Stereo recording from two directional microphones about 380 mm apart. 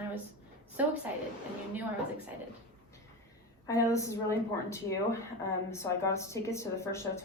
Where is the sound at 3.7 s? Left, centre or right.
Centre.